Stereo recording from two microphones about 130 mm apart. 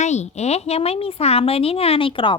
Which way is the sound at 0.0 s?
60° left (ahead or behind).